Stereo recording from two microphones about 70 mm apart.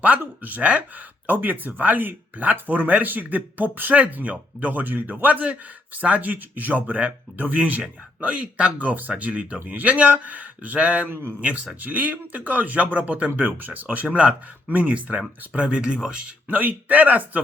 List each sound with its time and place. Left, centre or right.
0.0 s speech: right
11.1 s speech: right
11.3 s speech: centre